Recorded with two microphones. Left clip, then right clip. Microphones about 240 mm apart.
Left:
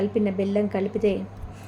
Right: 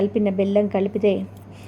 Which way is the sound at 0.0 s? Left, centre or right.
Centre.